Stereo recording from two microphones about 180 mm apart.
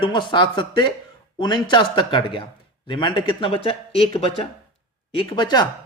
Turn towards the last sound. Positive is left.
turn(degrees=25)  # may be behind; listen again after turning